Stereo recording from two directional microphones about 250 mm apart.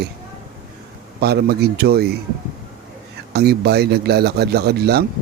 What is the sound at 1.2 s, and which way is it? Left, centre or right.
Speech, right.